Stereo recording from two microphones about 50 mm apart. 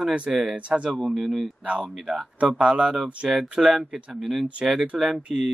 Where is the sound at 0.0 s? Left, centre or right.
Right.